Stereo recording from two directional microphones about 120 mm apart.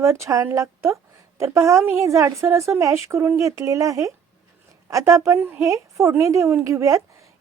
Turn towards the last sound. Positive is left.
turn(degrees=-25)  # may be behind; listen again after turning